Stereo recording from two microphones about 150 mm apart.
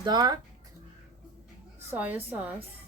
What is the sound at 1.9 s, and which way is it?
Speech, 10° right (ahead or behind).